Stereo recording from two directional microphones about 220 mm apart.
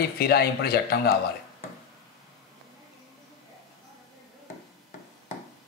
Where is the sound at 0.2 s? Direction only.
45° left (ahead or behind).